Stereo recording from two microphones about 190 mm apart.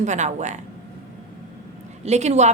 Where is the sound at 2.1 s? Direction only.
35° right (ahead or behind).